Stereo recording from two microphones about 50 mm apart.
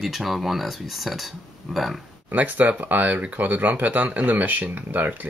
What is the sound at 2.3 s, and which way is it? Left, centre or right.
Speech, right.